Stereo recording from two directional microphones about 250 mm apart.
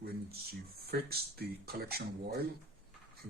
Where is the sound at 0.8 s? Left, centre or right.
Right.